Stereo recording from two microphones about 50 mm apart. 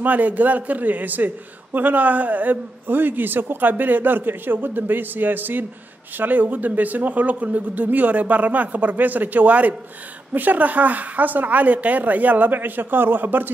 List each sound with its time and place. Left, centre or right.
0.0 s a man's voice: right